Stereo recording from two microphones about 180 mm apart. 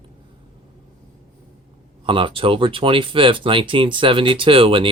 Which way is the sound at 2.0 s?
30° right (ahead or behind).